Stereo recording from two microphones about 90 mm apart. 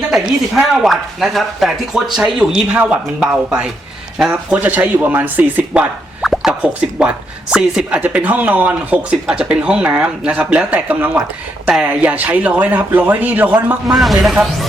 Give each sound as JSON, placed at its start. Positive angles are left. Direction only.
{"t": 0.1, "sound": "speech", "side_deg": -5}
{"t": 6.2, "sound": "speech", "side_deg": -5}
{"t": 13.9, "sound": "speech", "side_deg": 0}